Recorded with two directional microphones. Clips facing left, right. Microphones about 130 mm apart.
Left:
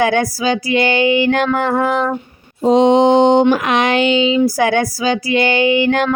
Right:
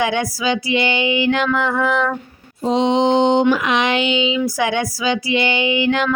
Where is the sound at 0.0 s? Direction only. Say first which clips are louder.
Left 4 dB; 45° left (ahead or behind).